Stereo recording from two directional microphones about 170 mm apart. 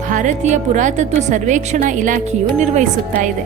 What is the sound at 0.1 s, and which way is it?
A woman's voice, 45° right (ahead or behind).